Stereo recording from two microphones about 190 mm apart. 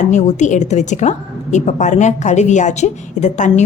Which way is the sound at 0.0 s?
35° left (ahead or behind).